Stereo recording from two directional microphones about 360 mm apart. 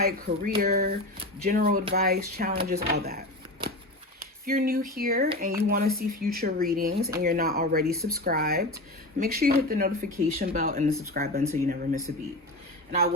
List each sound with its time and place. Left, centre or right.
0.0 s speech: right
4.4 s speech: right